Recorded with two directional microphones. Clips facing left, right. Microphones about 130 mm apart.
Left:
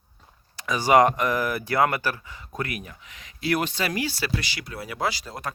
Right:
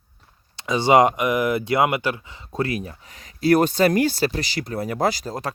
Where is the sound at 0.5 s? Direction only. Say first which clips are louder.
Right 3 dB; 25° right (ahead or behind).